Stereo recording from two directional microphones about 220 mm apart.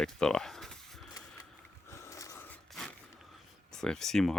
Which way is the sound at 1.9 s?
15° left (ahead or behind).